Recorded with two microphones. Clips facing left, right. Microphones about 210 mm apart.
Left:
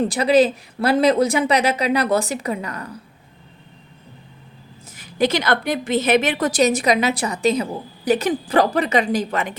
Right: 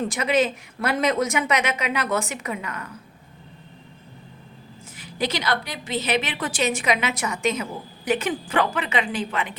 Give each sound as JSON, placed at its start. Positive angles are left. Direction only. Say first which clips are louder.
{"t": 0.0, "sound": "a woman's voice", "louder": "left 6 dB", "side_deg": 35}
{"t": 4.9, "sound": "a woman's voice", "louder": "left 7 dB", "side_deg": 50}